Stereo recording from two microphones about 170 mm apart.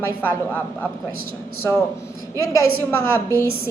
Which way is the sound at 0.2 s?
10° left (ahead or behind).